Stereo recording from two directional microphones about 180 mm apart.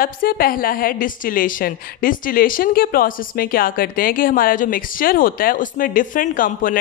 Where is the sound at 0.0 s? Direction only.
55° left (ahead or behind).